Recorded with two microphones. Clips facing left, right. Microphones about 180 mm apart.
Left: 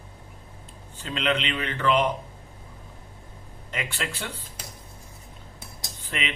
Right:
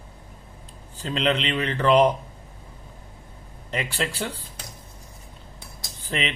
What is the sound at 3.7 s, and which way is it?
Speech, 35° right (ahead or behind).